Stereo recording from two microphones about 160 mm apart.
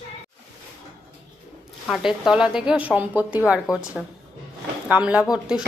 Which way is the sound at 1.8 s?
Centre (ahead or behind).